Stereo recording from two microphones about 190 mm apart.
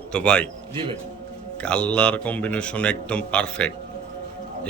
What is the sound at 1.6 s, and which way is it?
A man's voice, 5° left (ahead or behind).